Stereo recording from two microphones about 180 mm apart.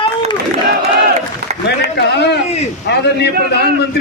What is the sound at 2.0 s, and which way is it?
A man's voice, 70° left (ahead or behind).